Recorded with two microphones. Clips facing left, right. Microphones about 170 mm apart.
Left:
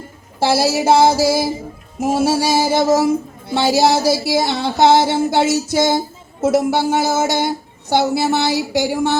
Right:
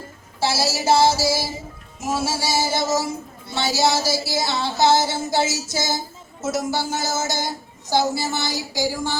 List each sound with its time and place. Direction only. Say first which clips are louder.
0.3 s a woman's voice: left 7 dB; 55° left (ahead or behind)